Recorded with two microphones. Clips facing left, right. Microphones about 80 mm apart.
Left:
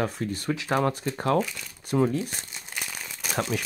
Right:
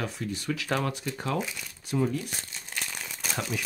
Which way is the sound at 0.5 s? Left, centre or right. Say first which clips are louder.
Left 5 dB; left.